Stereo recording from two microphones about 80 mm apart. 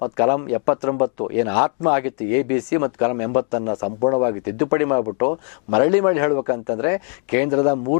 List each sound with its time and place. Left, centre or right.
0.0 s speech: centre